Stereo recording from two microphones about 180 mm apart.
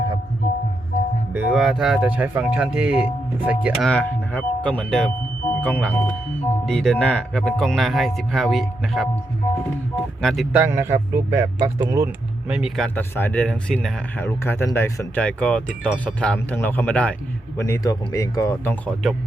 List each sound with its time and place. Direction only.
1.3 s speech: 5° right (ahead or behind)
10.2 s speech: centre (ahead or behind)
10.5 s speech: 10° right (ahead or behind)
12.5 s speech: centre (ahead or behind)
13.0 s speech: 10° left (ahead or behind)
17.6 s speech: 15° left (ahead or behind)